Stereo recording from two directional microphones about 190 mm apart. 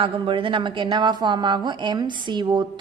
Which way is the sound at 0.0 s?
25° right (ahead or behind).